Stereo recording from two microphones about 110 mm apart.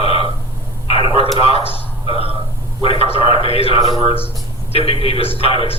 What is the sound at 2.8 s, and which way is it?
A man's voice, 60° left (ahead or behind).